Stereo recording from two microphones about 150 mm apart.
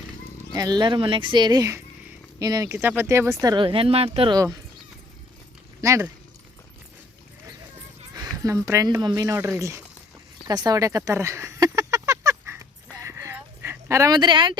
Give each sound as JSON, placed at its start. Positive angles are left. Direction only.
{"t": 0.5, "sound": "speech", "side_deg": -25}
{"t": 3.4, "sound": "speech", "side_deg": -30}
{"t": 5.8, "sound": "speech", "side_deg": -20}
{"t": 8.1, "sound": "speech", "side_deg": -25}
{"t": 10.4, "sound": "a sound", "side_deg": -25}